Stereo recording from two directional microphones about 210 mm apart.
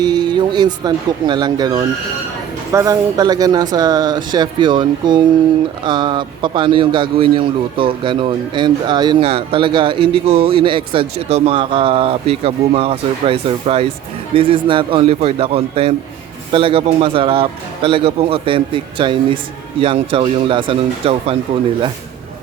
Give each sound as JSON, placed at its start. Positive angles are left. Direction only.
{"t": 0.0, "sound": "a man's voice", "side_deg": -20}